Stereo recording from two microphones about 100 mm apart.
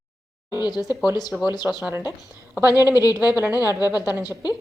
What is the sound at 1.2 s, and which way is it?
Speech, centre (ahead or behind).